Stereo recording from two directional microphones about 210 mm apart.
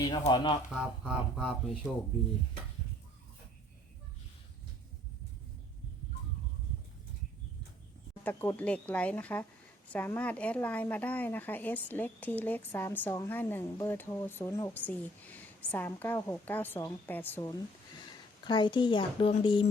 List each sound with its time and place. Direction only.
0.0 s speech: 20° left (ahead or behind)
0.7 s speech: 5° right (ahead or behind)
8.2 s speech: 10° left (ahead or behind); by 19.6 s 25° left (ahead or behind)